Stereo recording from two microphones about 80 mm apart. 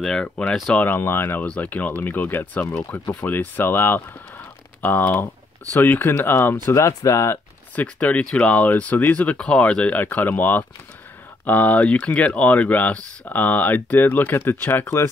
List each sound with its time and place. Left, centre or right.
0.0 s speech: centre
0.7 s speech: left
1.4 s speech: centre; by 7.3 s left
7.7 s speech: centre